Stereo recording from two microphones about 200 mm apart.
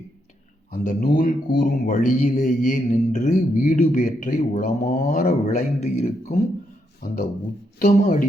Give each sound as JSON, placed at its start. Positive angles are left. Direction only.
{"t": 0.7, "sound": "speech", "side_deg": 45}
{"t": 7.0, "sound": "speech", "side_deg": 45}